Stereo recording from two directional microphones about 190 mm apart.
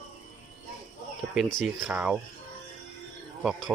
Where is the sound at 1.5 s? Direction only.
Centre (ahead or behind).